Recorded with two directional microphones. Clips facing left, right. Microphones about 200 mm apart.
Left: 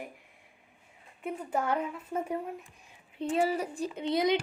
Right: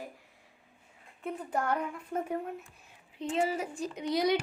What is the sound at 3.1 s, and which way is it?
A woman's voice, 35° left (ahead or behind).